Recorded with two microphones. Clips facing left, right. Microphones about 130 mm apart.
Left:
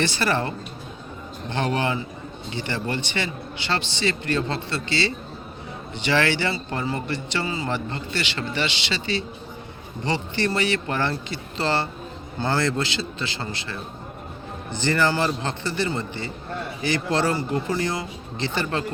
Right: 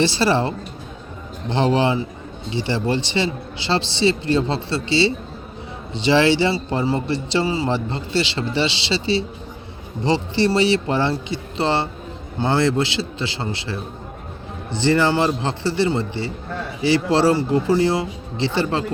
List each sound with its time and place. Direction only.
0.0 s a man's voice: 30° right (ahead or behind)